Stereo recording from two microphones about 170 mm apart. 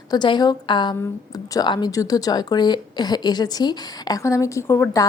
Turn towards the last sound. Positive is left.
turn(degrees=15)  # may be behind; listen again after turning